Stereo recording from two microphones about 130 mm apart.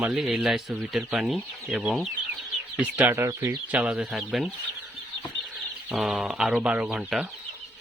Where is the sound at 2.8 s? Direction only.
15° right (ahead or behind).